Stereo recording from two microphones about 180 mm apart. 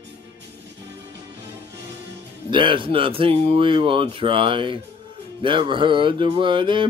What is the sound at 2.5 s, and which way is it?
Mantra, 25° right (ahead or behind).